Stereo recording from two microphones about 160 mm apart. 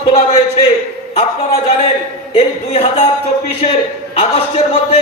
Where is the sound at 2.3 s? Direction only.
35° left (ahead or behind).